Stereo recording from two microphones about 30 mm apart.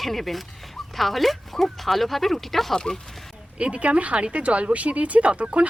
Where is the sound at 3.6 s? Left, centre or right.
Right.